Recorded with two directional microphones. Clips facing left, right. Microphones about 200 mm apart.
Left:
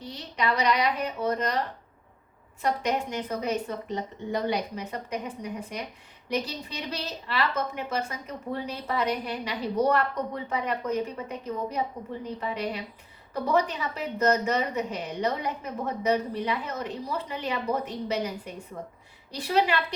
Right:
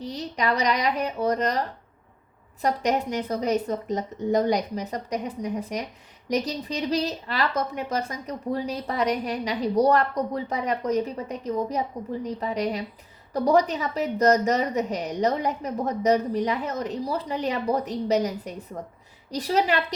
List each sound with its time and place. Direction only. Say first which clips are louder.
0.0 s a woman's voice: right 3 dB; 40° right (ahead or behind)